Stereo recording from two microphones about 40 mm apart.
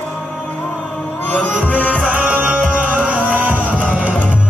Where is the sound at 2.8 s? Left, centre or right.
Right.